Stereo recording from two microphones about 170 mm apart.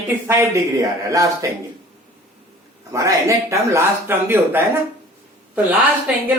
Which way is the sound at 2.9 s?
20° right (ahead or behind).